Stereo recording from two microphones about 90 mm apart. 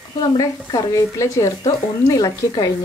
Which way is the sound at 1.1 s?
35° left (ahead or behind).